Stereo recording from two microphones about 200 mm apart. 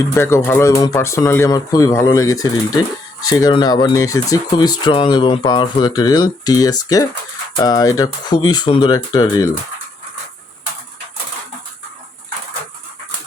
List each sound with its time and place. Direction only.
0.2 s speech: 15° left (ahead or behind)